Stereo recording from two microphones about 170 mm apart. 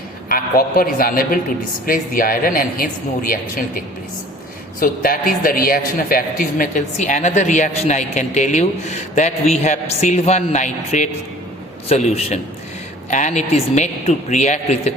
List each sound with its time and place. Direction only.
0.3 s speech: 55° left (ahead or behind)
4.8 s a man's voice: 50° left (ahead or behind)